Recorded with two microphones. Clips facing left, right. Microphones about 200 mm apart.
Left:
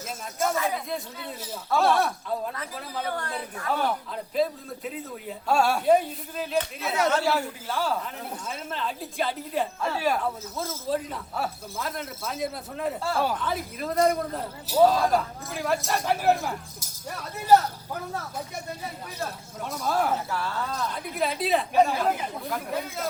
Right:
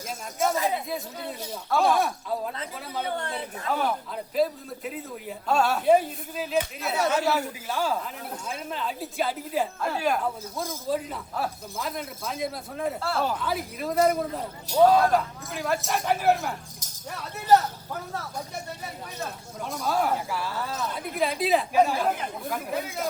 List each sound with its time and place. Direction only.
0.4 s speech: centre (ahead or behind)
3.2 s a man's voice: 25° right (ahead or behind)
5.5 s a woman's voice: 10° left (ahead or behind)
5.8 s a man's voice: 5° right (ahead or behind)
13.0 s a woman's voice: 10° left (ahead or behind)
13.3 s speech: 5° right (ahead or behind)
19.6 s speech: centre (ahead or behind)